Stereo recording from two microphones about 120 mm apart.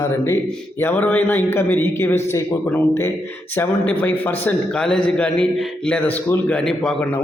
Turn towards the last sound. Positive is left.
turn(degrees=5)  # may be behind; listen again after turning